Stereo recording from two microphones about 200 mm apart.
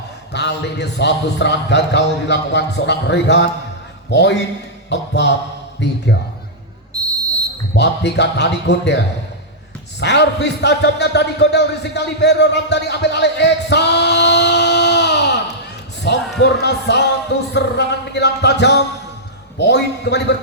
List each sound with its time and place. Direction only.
0.3 s a man's voice: 60° left (ahead or behind)
6.9 s a sound: 20° right (ahead or behind)
7.8 s a man's voice: 60° left (ahead or behind)
10.0 s a man's voice: 60° left (ahead or behind)
16.1 s basketball bounce: 60° left (ahead or behind)
16.4 s a man's voice: 60° left (ahead or behind)